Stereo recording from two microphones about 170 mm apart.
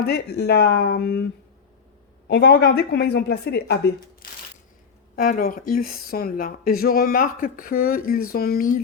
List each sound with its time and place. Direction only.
0.1 s a woman's voice: 75° left (ahead or behind)
2.2 s a woman's voice: 75° left (ahead or behind)
5.1 s speech: 55° left (ahead or behind)